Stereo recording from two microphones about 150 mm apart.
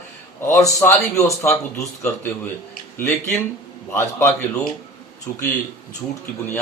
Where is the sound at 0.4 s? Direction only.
15° left (ahead or behind).